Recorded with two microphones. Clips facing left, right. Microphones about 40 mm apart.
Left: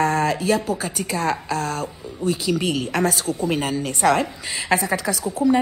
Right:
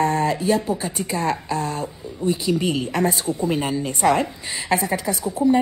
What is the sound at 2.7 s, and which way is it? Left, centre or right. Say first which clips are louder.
A woman's voice: even; centre.